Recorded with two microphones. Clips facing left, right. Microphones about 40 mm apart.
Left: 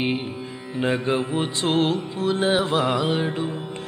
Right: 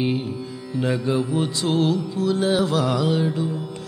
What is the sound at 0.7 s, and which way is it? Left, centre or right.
Carnatic music, left.